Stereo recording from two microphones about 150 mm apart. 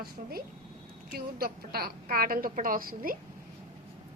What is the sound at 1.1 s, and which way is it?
A woman's voice, 90° right.